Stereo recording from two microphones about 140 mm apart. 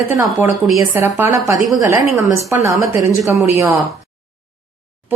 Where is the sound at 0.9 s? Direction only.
20° right (ahead or behind).